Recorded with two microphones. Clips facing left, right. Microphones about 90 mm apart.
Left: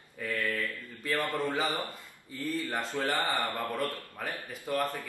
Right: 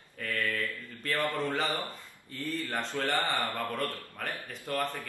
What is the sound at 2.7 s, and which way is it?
A man's voice, 5° left (ahead or behind).